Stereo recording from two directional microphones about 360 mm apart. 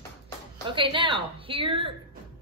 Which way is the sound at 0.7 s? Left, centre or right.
Centre.